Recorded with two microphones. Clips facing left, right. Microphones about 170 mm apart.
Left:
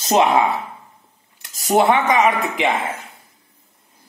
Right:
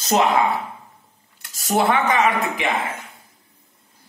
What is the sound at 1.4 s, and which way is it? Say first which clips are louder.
Speech: left 4 dB; 20° left (ahead or behind).